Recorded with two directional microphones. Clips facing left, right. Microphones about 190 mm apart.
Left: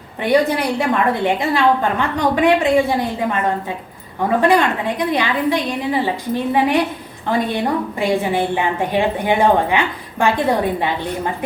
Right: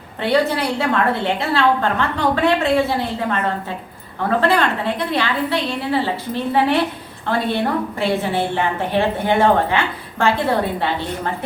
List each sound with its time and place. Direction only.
0.2 s a woman's voice: 15° left (ahead or behind)